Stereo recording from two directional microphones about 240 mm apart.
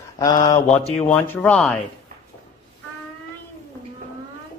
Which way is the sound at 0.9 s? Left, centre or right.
Centre.